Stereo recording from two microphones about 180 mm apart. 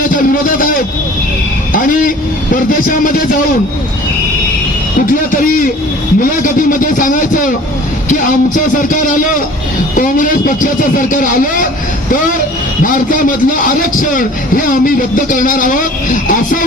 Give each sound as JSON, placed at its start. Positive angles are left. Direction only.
{"t": 0.1, "sound": "a man's voice", "side_deg": 50}
{"t": 5.3, "sound": "a man's voice", "side_deg": 50}
{"t": 12.8, "sound": "a man's voice", "side_deg": 50}